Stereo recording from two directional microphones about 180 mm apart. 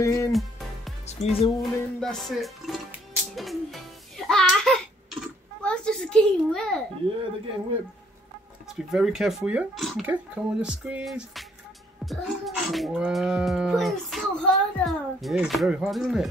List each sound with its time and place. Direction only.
0.0 s music: 15° left (ahead or behind)
0.3 s music: centre (ahead or behind)
1.0 s a woman's voice: 35° left (ahead or behind)
1.6 s music: centre (ahead or behind)
8.6 s speech: centre (ahead or behind)